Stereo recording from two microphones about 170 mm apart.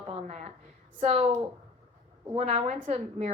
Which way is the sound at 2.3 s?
40° right (ahead or behind).